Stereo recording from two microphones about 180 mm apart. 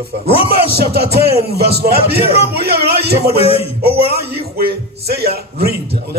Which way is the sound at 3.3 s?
35° left (ahead or behind).